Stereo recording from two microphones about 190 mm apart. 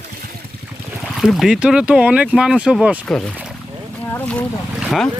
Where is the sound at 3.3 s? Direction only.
5° right (ahead or behind).